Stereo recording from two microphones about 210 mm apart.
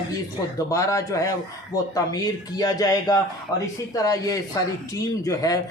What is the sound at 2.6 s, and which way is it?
A man's voice, 15° left (ahead or behind).